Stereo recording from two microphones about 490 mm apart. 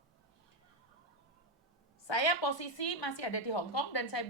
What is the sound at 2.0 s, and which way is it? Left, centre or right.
A woman's voice, left.